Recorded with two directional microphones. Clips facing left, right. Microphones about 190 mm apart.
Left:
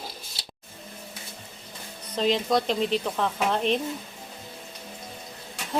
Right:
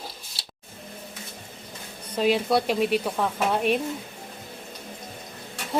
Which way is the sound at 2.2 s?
10° right (ahead or behind).